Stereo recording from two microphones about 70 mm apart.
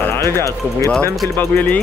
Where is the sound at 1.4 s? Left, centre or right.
Left.